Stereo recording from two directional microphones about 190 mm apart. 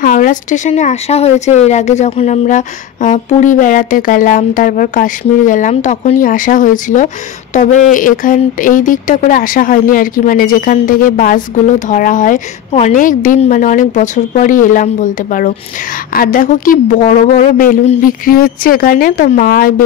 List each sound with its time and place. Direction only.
0.0 s speech: 45° left (ahead or behind)